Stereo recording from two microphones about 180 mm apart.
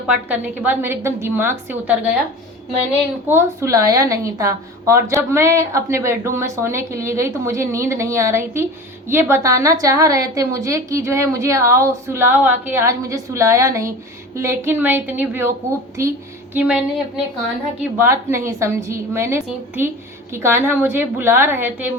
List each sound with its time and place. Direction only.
0.1 s a woman's voice: 10° right (ahead or behind)
3.2 s a woman's voice: 15° right (ahead or behind)
17.9 s a woman's voice: 15° right (ahead or behind)